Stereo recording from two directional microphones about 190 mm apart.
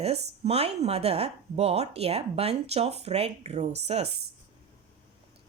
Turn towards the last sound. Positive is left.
turn(degrees=-35)  # may be behind; listen again after turning